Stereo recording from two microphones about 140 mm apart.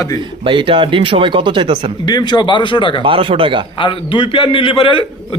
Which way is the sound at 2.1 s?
30° left (ahead or behind).